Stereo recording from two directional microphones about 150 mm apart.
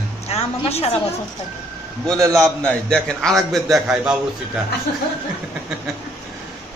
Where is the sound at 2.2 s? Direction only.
20° right (ahead or behind).